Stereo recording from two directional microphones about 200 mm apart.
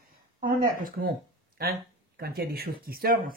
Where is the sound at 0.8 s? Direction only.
45° right (ahead or behind).